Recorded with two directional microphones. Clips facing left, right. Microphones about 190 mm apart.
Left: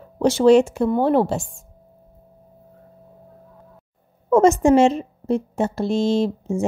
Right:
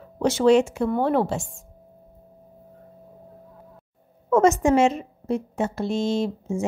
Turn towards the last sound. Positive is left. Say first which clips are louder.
# left 4 dB
turn(degrees=30)  # may be behind; listen again after turning